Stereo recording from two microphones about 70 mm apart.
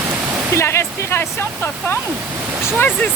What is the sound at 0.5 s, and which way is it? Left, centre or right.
Waterfall, left.